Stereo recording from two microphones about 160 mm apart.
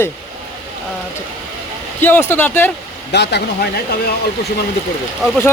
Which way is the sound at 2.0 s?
15° left (ahead or behind).